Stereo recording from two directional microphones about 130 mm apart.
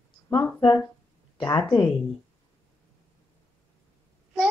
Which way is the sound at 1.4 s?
30° left (ahead or behind).